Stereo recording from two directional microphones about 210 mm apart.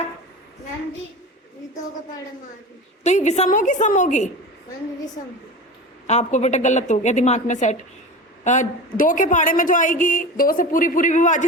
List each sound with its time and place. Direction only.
3.0 s a man's voice: 35° left (ahead or behind)
6.1 s a man's voice: 35° left (ahead or behind)